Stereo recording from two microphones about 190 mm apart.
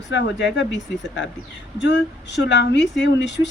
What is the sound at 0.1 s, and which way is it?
A woman's voice, 70° left (ahead or behind).